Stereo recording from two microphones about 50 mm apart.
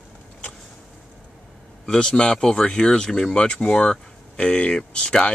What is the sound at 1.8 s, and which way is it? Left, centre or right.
Speech, centre.